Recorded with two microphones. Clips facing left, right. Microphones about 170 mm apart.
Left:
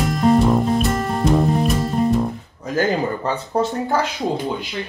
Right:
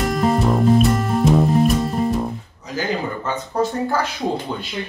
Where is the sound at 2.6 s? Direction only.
50° left (ahead or behind).